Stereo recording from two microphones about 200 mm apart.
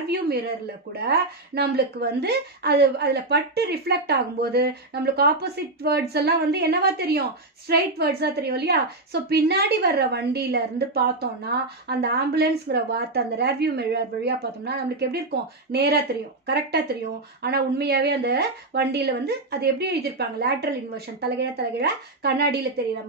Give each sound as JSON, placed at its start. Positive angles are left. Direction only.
{"t": 0.1, "sound": "a woman's voice", "side_deg": -50}